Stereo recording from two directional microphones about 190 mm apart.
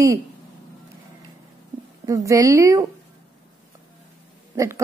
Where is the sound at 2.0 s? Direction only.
15° right (ahead or behind).